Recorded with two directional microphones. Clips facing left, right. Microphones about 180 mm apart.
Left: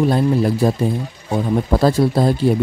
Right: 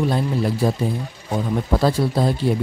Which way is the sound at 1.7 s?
45° left (ahead or behind).